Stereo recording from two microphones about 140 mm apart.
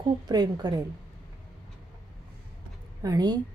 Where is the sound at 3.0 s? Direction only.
25° right (ahead or behind).